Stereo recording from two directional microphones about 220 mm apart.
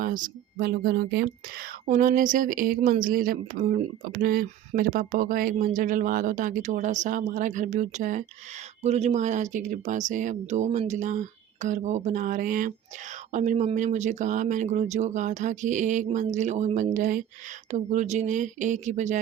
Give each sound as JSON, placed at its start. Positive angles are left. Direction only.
{"t": 0.0, "sound": "speech", "side_deg": -40}